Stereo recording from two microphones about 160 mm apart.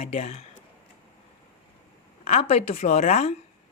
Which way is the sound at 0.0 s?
40° left (ahead or behind).